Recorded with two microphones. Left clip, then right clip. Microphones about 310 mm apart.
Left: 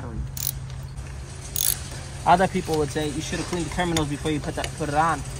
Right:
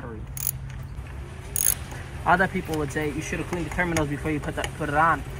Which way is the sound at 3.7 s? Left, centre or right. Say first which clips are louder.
Right 1 dB; centre.